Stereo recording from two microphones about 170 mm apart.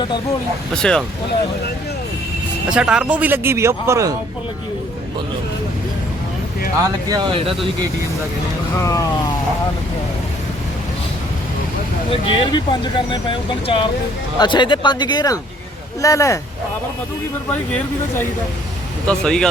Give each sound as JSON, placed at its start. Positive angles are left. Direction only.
{"t": 0.8, "sound": "speech", "side_deg": 5}
{"t": 2.6, "sound": "speech", "side_deg": -5}
{"t": 6.8, "sound": "speech", "side_deg": -25}
{"t": 8.8, "sound": "speech", "side_deg": 20}
{"t": 12.1, "sound": "speech", "side_deg": 30}
{"t": 19.0, "sound": "speech", "side_deg": 5}